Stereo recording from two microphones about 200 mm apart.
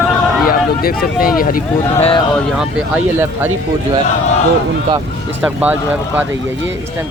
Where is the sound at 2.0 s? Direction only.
25° left (ahead or behind).